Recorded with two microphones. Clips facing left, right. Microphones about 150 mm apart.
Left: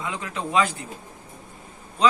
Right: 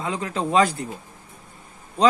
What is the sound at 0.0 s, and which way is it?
Speech, 35° right (ahead or behind).